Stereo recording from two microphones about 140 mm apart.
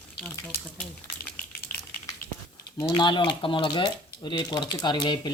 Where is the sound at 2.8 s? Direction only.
35° left (ahead or behind).